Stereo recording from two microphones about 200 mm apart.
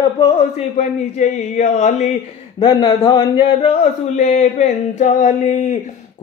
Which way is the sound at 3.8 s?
35° left (ahead or behind).